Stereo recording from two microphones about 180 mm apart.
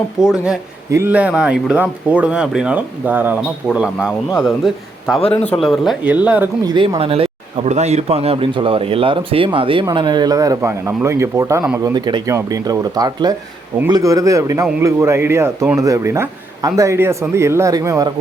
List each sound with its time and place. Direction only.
0.2 s a man's voice: 5° right (ahead or behind)
6.7 s a man's voice: 25° right (ahead or behind)